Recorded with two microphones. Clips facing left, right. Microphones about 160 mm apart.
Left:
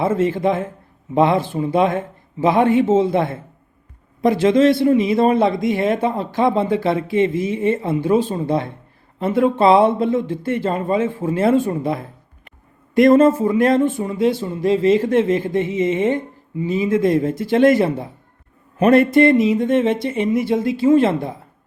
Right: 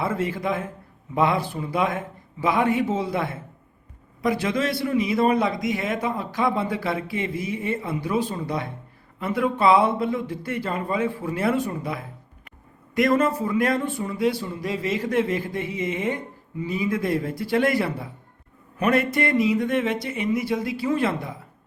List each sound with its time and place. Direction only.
0.0 s speech: 25° left (ahead or behind)